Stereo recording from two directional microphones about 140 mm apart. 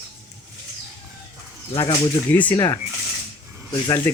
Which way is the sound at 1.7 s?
40° left (ahead or behind).